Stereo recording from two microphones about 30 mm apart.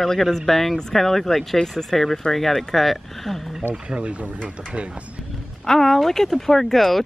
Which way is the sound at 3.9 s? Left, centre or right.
Right.